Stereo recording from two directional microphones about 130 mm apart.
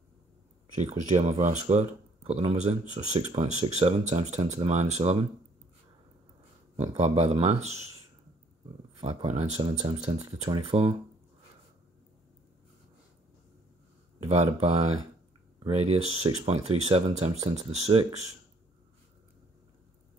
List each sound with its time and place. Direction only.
0.7 s speech: 60° right (ahead or behind)
7.0 s speech: 50° right (ahead or behind)
9.0 s speech: 50° right (ahead or behind)
10.5 s speech: 40° right (ahead or behind)
14.2 s speech: 55° right (ahead or behind)